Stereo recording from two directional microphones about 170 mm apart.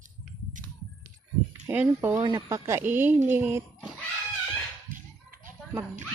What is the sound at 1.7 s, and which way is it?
Speech, 15° right (ahead or behind).